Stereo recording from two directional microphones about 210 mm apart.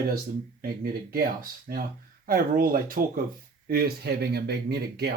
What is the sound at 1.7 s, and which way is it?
Speech, 45° right (ahead or behind).